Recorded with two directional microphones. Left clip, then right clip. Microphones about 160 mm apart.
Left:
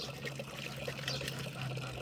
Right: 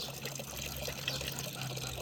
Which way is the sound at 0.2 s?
25° right (ahead or behind).